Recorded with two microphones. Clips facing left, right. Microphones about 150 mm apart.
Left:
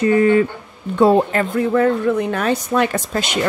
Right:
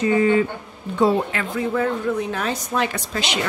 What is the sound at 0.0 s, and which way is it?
A woman's voice, 55° left (ahead or behind).